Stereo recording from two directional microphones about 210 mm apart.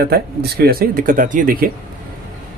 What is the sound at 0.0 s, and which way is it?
Speech, 50° right (ahead or behind).